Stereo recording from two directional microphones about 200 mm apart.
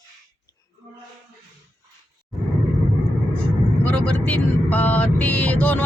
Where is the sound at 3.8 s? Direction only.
5° left (ahead or behind).